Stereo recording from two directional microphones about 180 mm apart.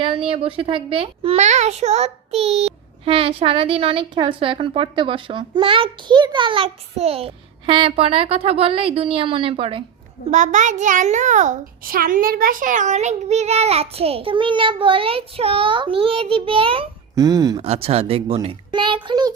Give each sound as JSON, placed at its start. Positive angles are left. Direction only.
{"t": 0.0, "sound": "a child's voice", "side_deg": -30}
{"t": 10.3, "sound": "a child's voice", "side_deg": -45}
{"t": 17.6, "sound": "a child's voice", "side_deg": -35}